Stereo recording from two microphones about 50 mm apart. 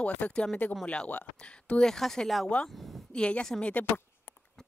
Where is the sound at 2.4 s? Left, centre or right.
Left.